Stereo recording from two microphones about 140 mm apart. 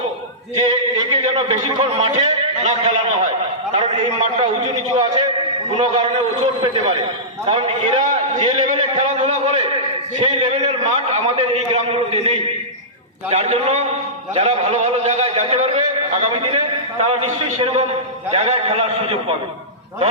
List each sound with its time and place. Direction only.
0.6 s speech: 40° right (ahead or behind)
1.6 s a man's voice: 45° right (ahead or behind)